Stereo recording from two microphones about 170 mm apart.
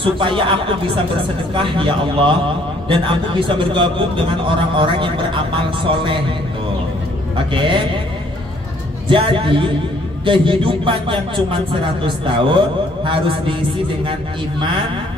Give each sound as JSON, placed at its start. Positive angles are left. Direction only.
{"t": 0.0, "sound": "a man's voice", "side_deg": -30}
{"t": 7.3, "sound": "a man's voice", "side_deg": -30}
{"t": 9.1, "sound": "a man's voice", "side_deg": -30}